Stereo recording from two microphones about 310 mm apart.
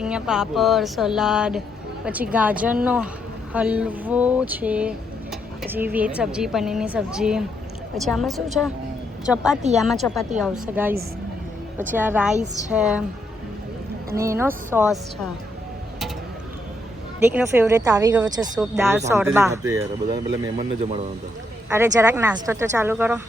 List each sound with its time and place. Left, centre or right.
0.0 s speech: centre
14.2 s speech: centre
17.3 s speech: centre